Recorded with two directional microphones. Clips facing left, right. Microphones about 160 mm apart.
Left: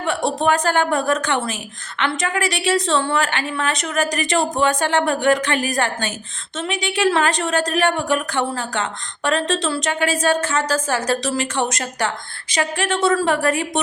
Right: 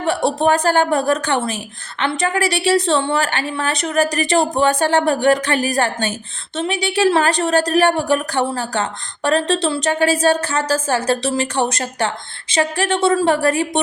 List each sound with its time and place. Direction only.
0.0 s a woman's voice: 35° right (ahead or behind)